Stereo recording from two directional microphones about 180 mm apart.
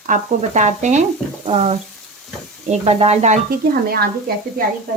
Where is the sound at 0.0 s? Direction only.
45° right (ahead or behind).